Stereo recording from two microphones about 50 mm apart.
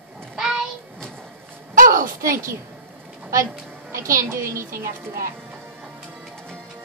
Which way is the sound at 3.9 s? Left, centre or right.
Right.